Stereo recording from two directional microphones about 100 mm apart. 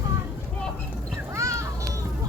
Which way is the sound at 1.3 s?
30° right (ahead or behind).